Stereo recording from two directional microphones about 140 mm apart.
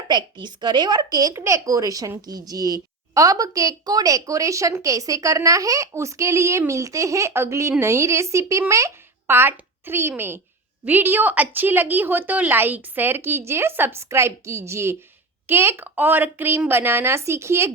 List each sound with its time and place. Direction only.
0.1 s a woman's voice: 30° right (ahead or behind)